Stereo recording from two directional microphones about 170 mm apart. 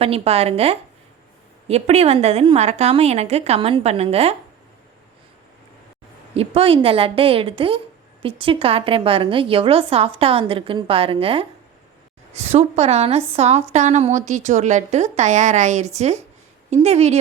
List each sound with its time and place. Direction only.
0.0 s a woman's voice: 35° right (ahead or behind)
6.3 s a woman's voice: 35° right (ahead or behind)